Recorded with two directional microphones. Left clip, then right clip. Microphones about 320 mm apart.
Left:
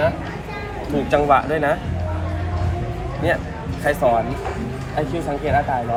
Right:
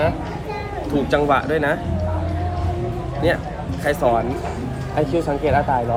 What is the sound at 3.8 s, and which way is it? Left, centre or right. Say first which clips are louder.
Speech: left 1 dB; centre.